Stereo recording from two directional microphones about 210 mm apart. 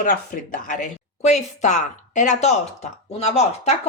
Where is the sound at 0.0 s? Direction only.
40° left (ahead or behind).